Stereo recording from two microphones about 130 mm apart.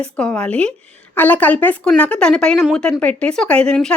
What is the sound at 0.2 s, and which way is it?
Speech, 5° left (ahead or behind).